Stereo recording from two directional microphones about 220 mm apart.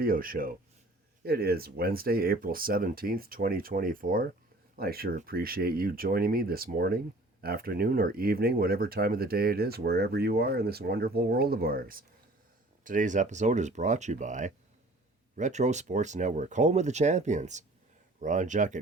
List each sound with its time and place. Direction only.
0.0 s speech: 40° right (ahead or behind)